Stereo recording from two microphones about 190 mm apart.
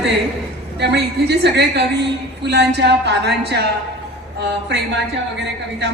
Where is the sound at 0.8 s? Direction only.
65° right (ahead or behind).